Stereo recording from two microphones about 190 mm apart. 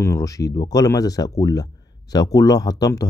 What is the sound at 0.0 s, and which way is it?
Speech, 15° left (ahead or behind).